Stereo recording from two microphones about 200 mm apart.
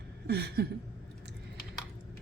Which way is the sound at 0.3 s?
55° right (ahead or behind).